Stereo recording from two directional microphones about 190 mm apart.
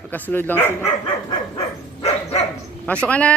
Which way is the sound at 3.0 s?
5° left (ahead or behind).